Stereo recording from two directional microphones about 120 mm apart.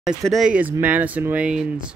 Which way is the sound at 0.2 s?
Centre (ahead or behind).